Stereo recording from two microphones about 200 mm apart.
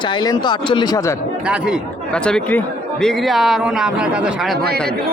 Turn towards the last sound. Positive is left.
turn(degrees=-55)  # may be behind; listen again after turning